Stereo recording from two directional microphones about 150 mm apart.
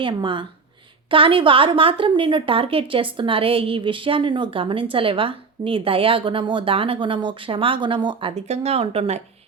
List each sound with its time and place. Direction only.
0.0 s a woman's voice: 35° right (ahead or behind)
8.4 s speech: 45° right (ahead or behind)